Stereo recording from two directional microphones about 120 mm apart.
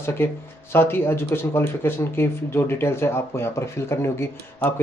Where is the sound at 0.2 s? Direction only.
20° left (ahead or behind).